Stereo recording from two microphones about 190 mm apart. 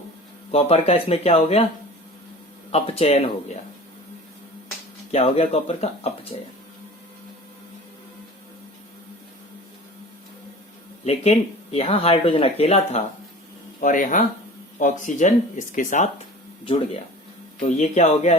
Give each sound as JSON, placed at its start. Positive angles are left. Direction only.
{"t": 0.5, "sound": "speech", "side_deg": 30}
{"t": 2.7, "sound": "speech", "side_deg": 30}
{"t": 5.1, "sound": "speech", "side_deg": 30}
{"t": 11.0, "sound": "speech", "side_deg": 35}
{"t": 13.8, "sound": "speech", "side_deg": 45}
{"t": 16.6, "sound": "speech", "side_deg": 30}